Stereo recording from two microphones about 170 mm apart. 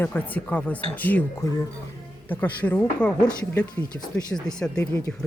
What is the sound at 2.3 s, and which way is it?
Speech, 10° left (ahead or behind).